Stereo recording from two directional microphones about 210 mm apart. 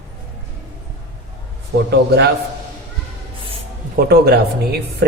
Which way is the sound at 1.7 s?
50° right (ahead or behind).